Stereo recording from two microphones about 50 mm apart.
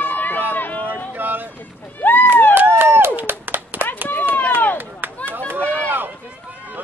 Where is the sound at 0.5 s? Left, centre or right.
Left.